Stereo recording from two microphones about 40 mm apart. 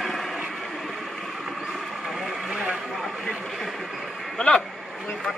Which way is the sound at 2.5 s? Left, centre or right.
Centre.